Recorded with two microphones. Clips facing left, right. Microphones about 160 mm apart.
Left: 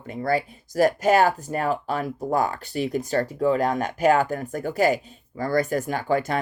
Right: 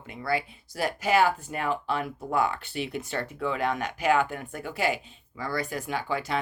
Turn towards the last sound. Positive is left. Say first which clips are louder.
# left 6 dB
turn(degrees=50)  # may be behind; listen again after turning